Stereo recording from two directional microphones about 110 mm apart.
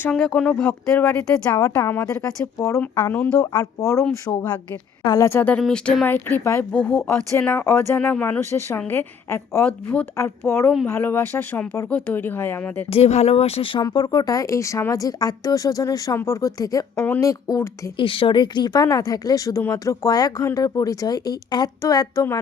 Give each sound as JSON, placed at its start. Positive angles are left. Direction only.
{"t": 0.1, "sound": "a woman's voice", "side_deg": 10}
{"t": 2.8, "sound": "speech", "side_deg": 15}
{"t": 3.4, "sound": "speech", "side_deg": 35}
{"t": 5.0, "sound": "speech", "side_deg": 35}
{"t": 5.3, "sound": "speech", "side_deg": 20}
{"t": 5.5, "sound": "speech", "side_deg": 5}
{"t": 6.7, "sound": "a woman's voice", "side_deg": 10}
{"t": 12.9, "sound": "speech", "side_deg": 70}
{"t": 13.7, "sound": "a woman's voice", "side_deg": 40}
{"t": 17.9, "sound": "speech", "side_deg": 50}